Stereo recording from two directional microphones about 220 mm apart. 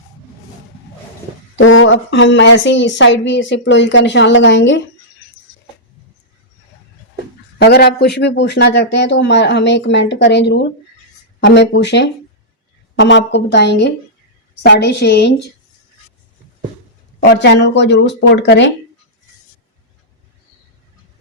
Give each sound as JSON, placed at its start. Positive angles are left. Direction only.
{"t": 1.5, "sound": "speech", "side_deg": 60}
{"t": 7.6, "sound": "speech", "side_deg": 45}
{"t": 17.2, "sound": "speech", "side_deg": 50}